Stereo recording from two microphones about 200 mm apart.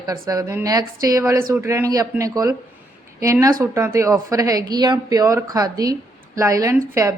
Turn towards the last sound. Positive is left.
turn(degrees=-15)  # may be behind; listen again after turning